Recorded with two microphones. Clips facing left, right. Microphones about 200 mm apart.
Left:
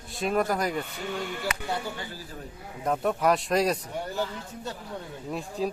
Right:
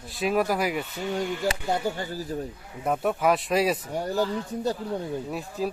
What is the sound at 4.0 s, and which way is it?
Speech, 40° right (ahead or behind).